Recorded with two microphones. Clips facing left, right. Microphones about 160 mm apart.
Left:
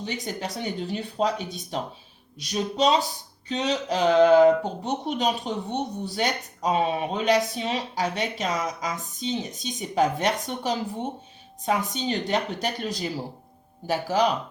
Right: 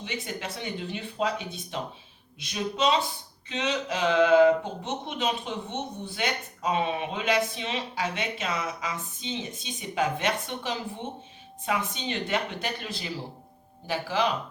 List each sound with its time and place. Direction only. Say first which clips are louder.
0.0 s speech: left 3 dB; 40° left (ahead or behind)